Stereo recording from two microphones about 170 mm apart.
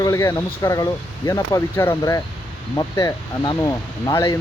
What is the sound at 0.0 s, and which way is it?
Speech, 20° left (ahead or behind).